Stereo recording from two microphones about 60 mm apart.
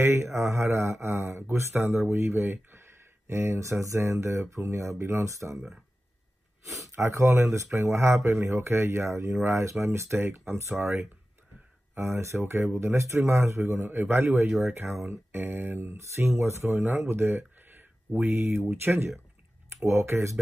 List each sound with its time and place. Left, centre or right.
0.0 s speech: right
7.0 s speech: right
7.2 s speech: right
7.5 s speech: right
12.0 s speech: right
13.8 s speech: right
16.0 s speech: right